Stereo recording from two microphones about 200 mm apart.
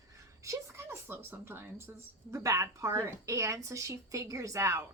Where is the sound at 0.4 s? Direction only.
15° right (ahead or behind).